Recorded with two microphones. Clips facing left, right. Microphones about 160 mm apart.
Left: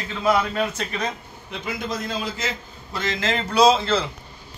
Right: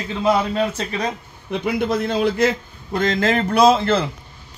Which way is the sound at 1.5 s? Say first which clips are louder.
Right 9 dB; 60° right (ahead or behind).